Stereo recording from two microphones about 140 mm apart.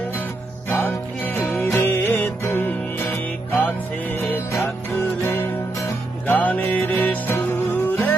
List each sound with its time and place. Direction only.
0.7 s music: 15° left (ahead or behind)